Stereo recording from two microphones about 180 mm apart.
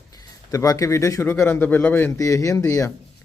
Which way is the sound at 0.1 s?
20° left (ahead or behind).